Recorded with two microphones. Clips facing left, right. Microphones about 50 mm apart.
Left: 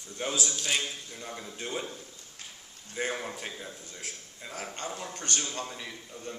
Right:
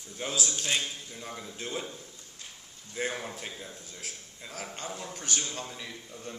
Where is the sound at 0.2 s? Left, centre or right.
Centre.